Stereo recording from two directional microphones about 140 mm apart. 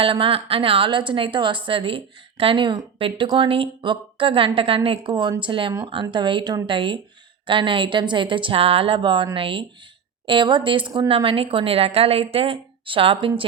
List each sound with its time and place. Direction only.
0.0 s a woman's voice: 40° right (ahead or behind)